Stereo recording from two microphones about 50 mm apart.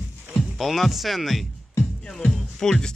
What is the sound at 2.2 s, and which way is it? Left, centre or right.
Speech, centre.